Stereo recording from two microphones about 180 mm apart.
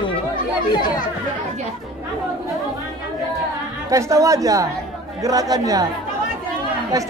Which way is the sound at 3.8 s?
15° right (ahead or behind).